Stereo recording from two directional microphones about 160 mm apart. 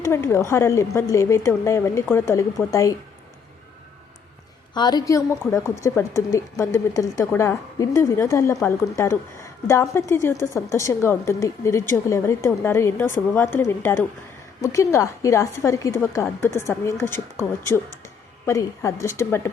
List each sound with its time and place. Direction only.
0.0 s a woman's voice: 15° left (ahead or behind)
4.7 s a woman's voice: 25° left (ahead or behind)